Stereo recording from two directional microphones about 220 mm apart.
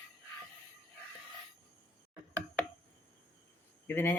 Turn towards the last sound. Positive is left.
turn(degrees=10)  # may be behind; listen again after turning